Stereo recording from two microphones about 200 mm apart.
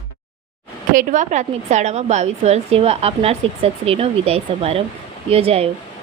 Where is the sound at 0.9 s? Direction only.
40° right (ahead or behind).